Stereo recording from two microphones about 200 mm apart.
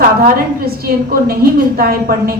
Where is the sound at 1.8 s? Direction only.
50° right (ahead or behind).